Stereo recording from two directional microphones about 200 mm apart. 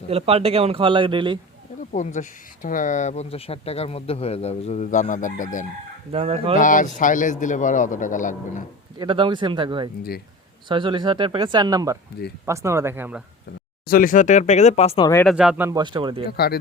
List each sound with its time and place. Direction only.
0.1 s speech: 30° right (ahead or behind)
1.9 s speech: 40° left (ahead or behind)
6.1 s speech: 30° right (ahead or behind)
6.6 s speech: 40° left (ahead or behind)
9.0 s speech: 25° right (ahead or behind); by 13.2 s 10° right (ahead or behind)
13.8 s speech: 45° left (ahead or behind); by 15.1 s 30° left (ahead or behind)
15.1 s speech: 5° left (ahead or behind)
15.4 s speech: 5° right (ahead or behind)
15.8 s speech: 25° right (ahead or behind)